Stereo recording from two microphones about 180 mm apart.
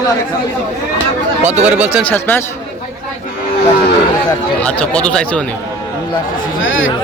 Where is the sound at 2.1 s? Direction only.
10° left (ahead or behind).